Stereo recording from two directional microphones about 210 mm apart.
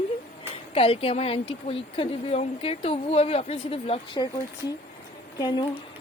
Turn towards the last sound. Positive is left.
turn(degrees=20)  # may be behind; listen again after turning